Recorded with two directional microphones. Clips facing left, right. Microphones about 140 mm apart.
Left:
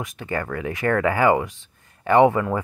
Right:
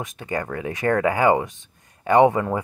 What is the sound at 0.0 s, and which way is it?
Speech, 20° right (ahead or behind).